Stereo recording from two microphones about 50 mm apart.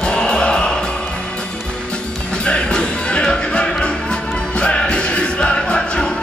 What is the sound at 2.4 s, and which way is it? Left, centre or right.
Music, centre.